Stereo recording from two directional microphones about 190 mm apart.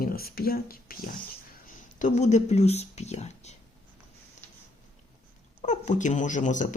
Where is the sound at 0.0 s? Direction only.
50° left (ahead or behind).